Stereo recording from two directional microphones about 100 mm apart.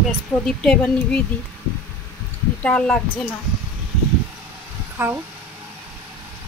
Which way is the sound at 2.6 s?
10° left (ahead or behind).